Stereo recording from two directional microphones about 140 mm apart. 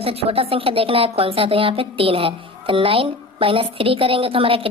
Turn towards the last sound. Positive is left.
turn(degrees=-40)  # may be behind; listen again after turning